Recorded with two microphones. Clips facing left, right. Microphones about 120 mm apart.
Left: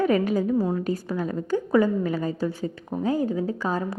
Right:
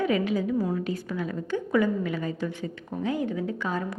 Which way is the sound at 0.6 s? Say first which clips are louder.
Left 3 dB; 30° left (ahead or behind).